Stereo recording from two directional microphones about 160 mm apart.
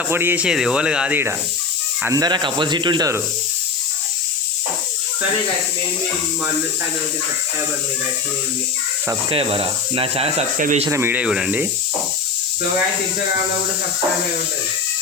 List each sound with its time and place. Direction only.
0.1 s speech: 15° right (ahead or behind)
2.0 s speech: 25° right (ahead or behind)
9.3 s speech: 35° right (ahead or behind)
10.6 s speech: 50° right (ahead or behind)
10.8 s speech: 15° right (ahead or behind)